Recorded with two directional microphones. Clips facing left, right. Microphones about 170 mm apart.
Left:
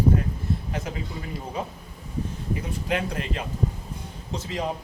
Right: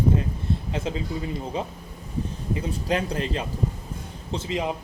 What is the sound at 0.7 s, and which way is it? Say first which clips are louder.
Speech: right 3 dB; 25° right (ahead or behind).